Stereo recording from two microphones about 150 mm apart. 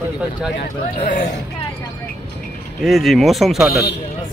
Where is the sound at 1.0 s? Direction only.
65° left (ahead or behind).